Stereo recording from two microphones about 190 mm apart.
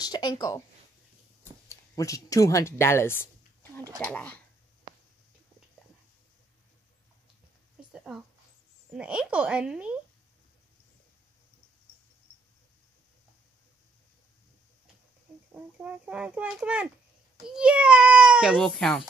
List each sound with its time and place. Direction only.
0.0 s speech: 20° left (ahead or behind)
1.7 s speech: 15° left (ahead or behind)
4.9 s a sound: 20° right (ahead or behind)
7.9 s a sound: centre (ahead or behind)
8.9 s speech: 5° right (ahead or behind)
15.5 s a child's voice: 5° right (ahead or behind)